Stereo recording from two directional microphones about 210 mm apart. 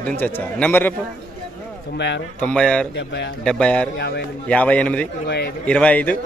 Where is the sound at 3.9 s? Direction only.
50° left (ahead or behind).